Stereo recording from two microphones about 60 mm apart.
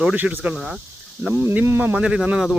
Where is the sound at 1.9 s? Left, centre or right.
Centre.